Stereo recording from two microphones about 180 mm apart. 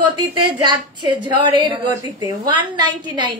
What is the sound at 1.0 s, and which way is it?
A woman's voice, 25° right (ahead or behind).